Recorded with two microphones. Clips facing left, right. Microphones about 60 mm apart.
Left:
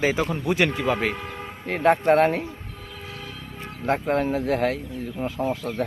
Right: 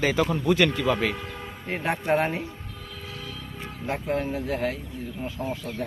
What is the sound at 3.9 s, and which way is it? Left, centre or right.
Speech, left.